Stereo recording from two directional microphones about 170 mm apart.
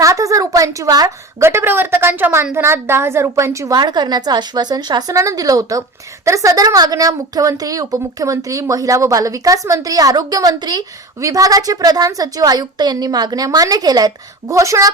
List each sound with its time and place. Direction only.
0.0 s a woman's voice: 20° right (ahead or behind)